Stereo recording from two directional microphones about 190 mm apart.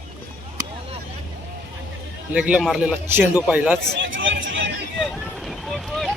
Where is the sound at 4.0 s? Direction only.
80° right.